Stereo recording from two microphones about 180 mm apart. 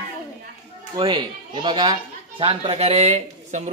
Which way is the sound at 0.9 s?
25° right (ahead or behind).